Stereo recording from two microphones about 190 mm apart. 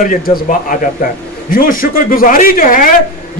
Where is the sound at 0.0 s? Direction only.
50° left (ahead or behind).